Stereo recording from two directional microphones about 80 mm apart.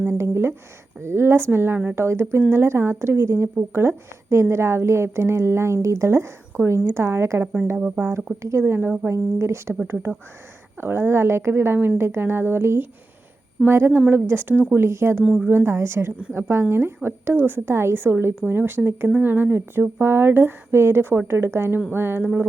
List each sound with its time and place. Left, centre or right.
0.0 s a sound: right
1.0 s a woman's voice: right
7.8 s speech: centre
8.0 s a woman's voice: right